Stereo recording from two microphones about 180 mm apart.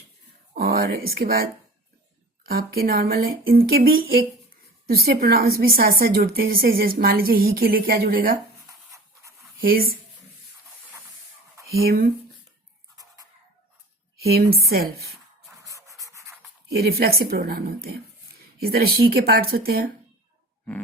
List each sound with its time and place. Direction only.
0.5 s a woman's voice: 60° right (ahead or behind)
8.5 s rub: 15° right (ahead or behind)
9.6 s speech: 55° right (ahead or behind)
11.8 s a woman's voice: 55° right (ahead or behind)
14.2 s a woman's voice: 60° right (ahead or behind)
15.6 s writing: 20° right (ahead or behind)
16.7 s a woman's voice: 60° right (ahead or behind)